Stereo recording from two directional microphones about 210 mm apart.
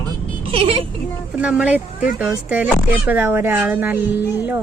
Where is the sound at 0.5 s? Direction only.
25° right (ahead or behind).